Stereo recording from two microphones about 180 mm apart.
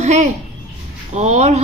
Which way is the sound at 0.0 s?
40° right (ahead or behind).